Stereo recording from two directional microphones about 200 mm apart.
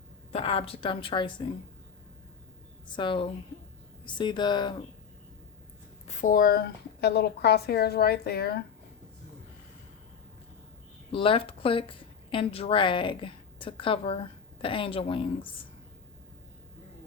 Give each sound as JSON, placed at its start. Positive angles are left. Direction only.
{"t": 0.3, "sound": "a woman's voice", "side_deg": 30}
{"t": 2.8, "sound": "a woman's voice", "side_deg": 25}
{"t": 6.1, "sound": "speech", "side_deg": 40}
{"t": 11.1, "sound": "a woman's voice", "side_deg": 25}